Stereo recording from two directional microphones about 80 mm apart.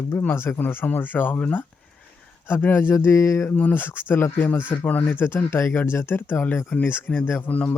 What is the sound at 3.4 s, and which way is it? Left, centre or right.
Speech, left.